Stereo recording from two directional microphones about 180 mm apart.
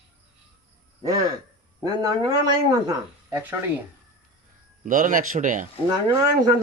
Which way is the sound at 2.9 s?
10° right (ahead or behind).